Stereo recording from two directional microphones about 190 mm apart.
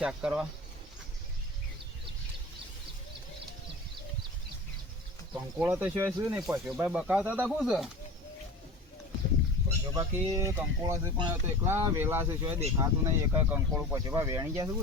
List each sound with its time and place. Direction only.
0.0 s speech: 5° right (ahead or behind)
5.3 s speech: 10° right (ahead or behind)
9.9 s speech: 20° right (ahead or behind)